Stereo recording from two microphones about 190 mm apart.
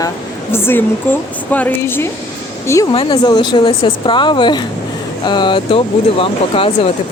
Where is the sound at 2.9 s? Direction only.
25° left (ahead or behind).